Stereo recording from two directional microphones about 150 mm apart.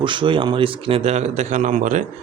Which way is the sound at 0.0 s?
35° right (ahead or behind).